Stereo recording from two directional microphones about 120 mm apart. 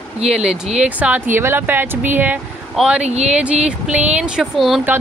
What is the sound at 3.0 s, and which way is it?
Speech, 65° right (ahead or behind).